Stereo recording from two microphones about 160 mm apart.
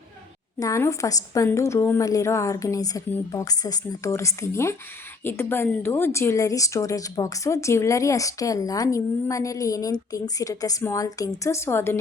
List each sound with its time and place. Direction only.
0.6 s speech: 20° left (ahead or behind)